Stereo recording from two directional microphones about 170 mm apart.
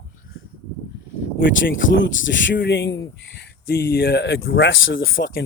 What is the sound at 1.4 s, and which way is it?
Speech, 75° left (ahead or behind).